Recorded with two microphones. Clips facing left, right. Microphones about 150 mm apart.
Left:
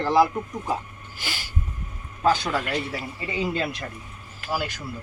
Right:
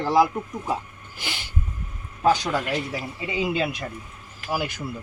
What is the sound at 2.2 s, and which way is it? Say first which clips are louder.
Speech: right 1 dB; 15° right (ahead or behind).